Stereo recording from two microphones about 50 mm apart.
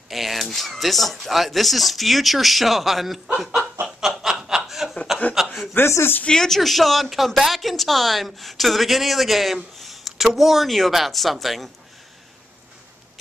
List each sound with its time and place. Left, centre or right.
0.1 s a woman's voice: centre
4.1 s snicker: centre
5.3 s speech: centre
5.9 s speech: left
6.2 s a woman's voice: centre